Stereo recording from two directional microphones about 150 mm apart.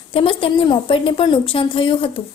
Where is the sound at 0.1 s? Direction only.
35° left (ahead or behind).